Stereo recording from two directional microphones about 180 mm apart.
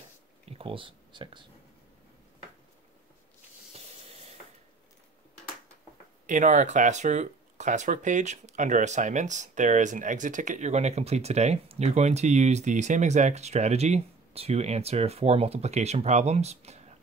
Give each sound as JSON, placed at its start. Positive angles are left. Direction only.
{"t": 0.5, "sound": "speech", "side_deg": -30}
{"t": 3.7, "sound": "hiss", "side_deg": -35}
{"t": 6.2, "sound": "speech", "side_deg": -45}